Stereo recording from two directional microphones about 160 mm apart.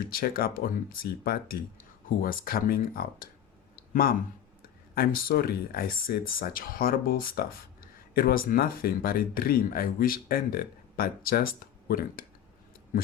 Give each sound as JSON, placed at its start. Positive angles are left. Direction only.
{"t": 0.1, "sound": "speech", "side_deg": 70}
{"t": 4.9, "sound": "speech", "side_deg": 70}